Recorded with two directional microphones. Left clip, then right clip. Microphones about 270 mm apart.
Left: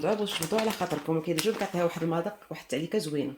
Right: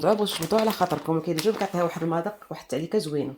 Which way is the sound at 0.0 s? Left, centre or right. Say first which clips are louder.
Right 5 dB; right.